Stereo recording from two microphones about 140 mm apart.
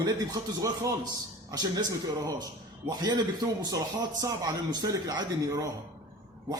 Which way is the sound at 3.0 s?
30° right (ahead or behind).